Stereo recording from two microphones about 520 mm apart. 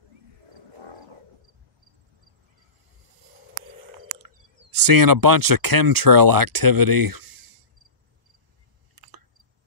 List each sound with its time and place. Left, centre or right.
0.7 s wild animals: right
4.2 s speech: right
8.9 s chewing: right